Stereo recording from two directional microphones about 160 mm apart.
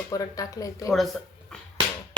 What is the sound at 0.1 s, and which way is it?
Speech, 20° left (ahead or behind).